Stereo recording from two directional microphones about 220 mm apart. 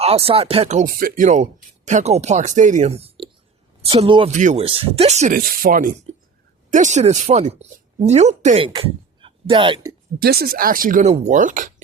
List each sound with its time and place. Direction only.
0.0 s speech: 25° right (ahead or behind)
10.2 s speech: 45° right (ahead or behind)